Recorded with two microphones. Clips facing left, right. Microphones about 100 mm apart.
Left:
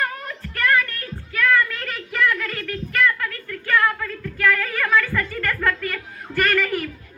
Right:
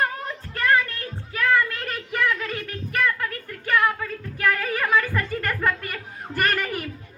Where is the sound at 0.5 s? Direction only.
25° right (ahead or behind).